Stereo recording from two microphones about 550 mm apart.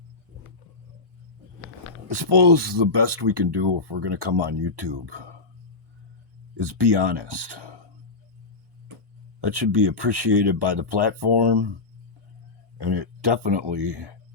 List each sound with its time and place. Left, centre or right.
2.0 s speech: right
6.6 s speech: right
9.4 s speech: right
12.8 s speech: right